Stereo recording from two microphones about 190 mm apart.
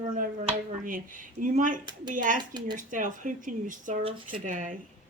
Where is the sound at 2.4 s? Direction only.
20° right (ahead or behind).